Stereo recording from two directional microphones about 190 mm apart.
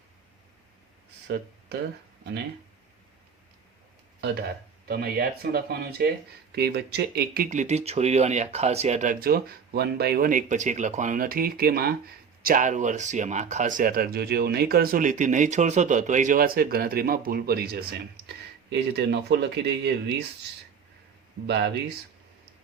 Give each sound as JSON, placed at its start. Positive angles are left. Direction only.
{"t": 1.3, "sound": "speech", "side_deg": -60}
{"t": 4.2, "sound": "speech", "side_deg": -55}
{"t": 21.4, "sound": "speech", "side_deg": -60}